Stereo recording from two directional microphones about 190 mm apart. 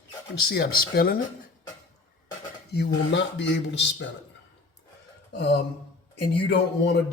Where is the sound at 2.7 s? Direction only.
65° left (ahead or behind).